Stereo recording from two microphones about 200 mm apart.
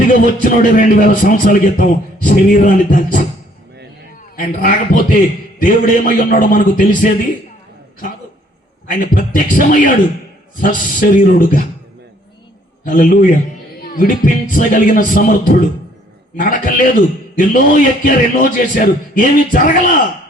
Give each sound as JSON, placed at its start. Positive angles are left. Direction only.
{"t": 0.4, "sound": "a man's voice", "side_deg": 40}
{"t": 4.4, "sound": "a man's voice", "side_deg": 40}
{"t": 8.9, "sound": "a man's voice", "side_deg": 45}
{"t": 12.8, "sound": "a man's voice", "side_deg": 45}